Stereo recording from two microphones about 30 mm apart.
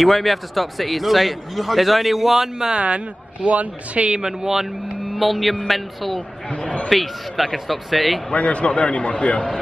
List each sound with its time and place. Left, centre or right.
0.0 s a man's voice: centre
3.4 s speech: right
4.4 s speech: centre
5.1 s a man's voice: centre
6.5 s speech: left
6.9 s a man's voice: centre
8.3 s a man's voice: left